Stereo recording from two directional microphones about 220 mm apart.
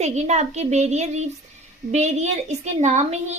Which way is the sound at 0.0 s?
30° right (ahead or behind).